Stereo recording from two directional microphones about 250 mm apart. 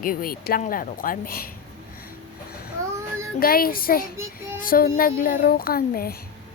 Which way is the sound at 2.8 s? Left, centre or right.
Centre.